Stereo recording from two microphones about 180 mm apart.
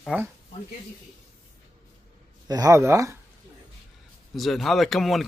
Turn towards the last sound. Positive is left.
turn(degrees=0)  # may be behind; listen again after turning